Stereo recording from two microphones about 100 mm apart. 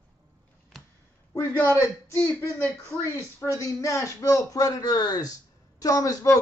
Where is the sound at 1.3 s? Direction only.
35° left (ahead or behind).